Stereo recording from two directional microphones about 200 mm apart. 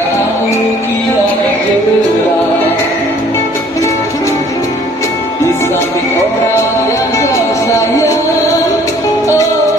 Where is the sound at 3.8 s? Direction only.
15° left (ahead or behind).